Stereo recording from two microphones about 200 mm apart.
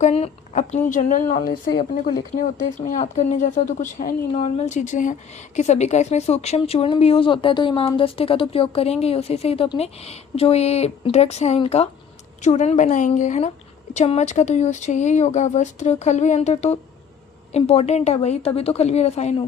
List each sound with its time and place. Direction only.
0.0 s a woman's voice: 35° left (ahead or behind)